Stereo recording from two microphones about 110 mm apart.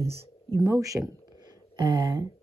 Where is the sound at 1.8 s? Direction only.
45° right (ahead or behind).